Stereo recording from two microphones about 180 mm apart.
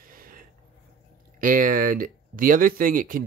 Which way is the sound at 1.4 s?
50° right (ahead or behind).